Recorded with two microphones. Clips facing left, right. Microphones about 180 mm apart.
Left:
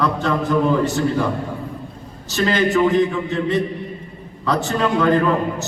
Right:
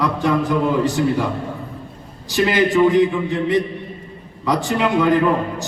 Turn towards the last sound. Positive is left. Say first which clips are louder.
# right 1 dB
turn(degrees=-15)  # may be behind; listen again after turning